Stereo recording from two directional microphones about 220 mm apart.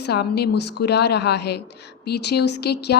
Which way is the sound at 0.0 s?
50° left (ahead or behind).